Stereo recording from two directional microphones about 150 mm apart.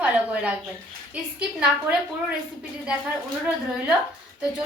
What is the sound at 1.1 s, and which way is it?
Speech, 5° right (ahead or behind).